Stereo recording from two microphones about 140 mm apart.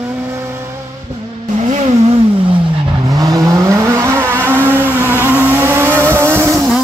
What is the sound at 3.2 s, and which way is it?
Vehicle, 25° right (ahead or behind).